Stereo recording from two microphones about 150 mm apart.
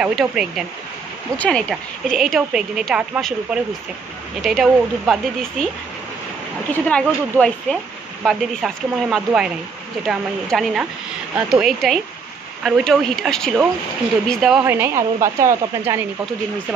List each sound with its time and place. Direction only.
0.0 s a woman's voice: 5° right (ahead or behind)
4.4 s a woman's voice: centre (ahead or behind)
6.7 s a woman's voice: 10° left (ahead or behind)
14.6 s a woman's voice: 15° right (ahead or behind)